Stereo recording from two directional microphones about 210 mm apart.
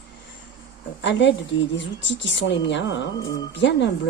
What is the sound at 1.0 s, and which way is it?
Speech, 60° left (ahead or behind).